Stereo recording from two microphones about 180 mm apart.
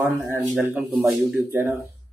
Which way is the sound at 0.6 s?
10° right (ahead or behind).